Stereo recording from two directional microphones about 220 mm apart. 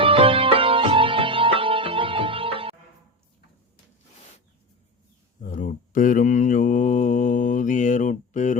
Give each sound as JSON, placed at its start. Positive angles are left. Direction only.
{"t": 0.0, "sound": "music", "side_deg": -25}
{"t": 5.4, "sound": "mantra", "side_deg": 35}